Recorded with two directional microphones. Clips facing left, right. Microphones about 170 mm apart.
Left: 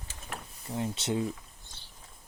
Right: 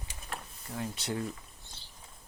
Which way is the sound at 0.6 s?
25° left (ahead or behind).